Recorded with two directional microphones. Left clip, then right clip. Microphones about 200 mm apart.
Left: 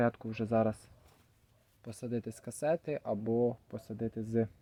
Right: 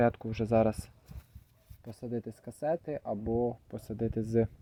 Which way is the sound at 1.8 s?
10° left (ahead or behind).